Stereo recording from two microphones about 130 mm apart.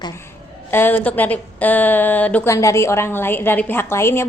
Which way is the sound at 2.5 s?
20° left (ahead or behind).